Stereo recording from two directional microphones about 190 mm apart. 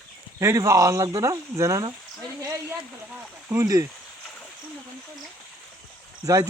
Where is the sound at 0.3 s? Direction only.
15° right (ahead or behind).